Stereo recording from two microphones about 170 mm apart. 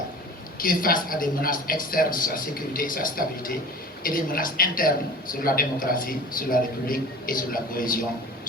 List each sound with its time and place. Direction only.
0.6 s a man's voice: 55° left (ahead or behind)